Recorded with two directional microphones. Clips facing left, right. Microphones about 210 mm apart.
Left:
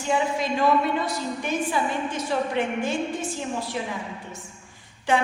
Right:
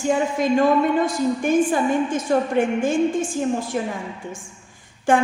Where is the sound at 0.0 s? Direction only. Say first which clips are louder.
Right 4 dB; 50° right (ahead or behind).